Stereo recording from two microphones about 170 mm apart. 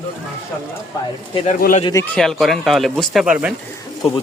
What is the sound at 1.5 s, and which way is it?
Speech, 50° left (ahead or behind).